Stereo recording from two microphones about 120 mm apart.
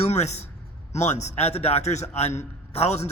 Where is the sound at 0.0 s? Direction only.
65° left (ahead or behind).